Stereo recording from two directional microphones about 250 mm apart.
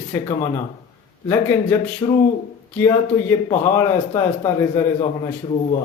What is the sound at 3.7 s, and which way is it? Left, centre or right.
Speech, centre.